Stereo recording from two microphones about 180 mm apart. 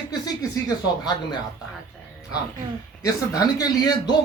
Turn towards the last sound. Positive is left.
turn(degrees=20)  # may be behind; listen again after turning